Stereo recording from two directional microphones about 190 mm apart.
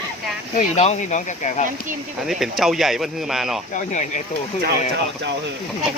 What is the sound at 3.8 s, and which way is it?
Speech, 40° left (ahead or behind).